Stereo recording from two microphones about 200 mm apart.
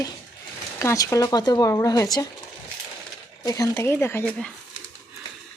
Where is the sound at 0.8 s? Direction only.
15° left (ahead or behind).